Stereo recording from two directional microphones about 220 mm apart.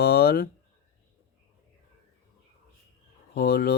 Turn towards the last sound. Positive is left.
turn(degrees=45)  # may be behind; listen again after turning